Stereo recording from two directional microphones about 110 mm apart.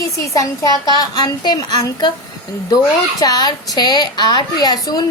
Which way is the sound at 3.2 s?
40° left (ahead or behind).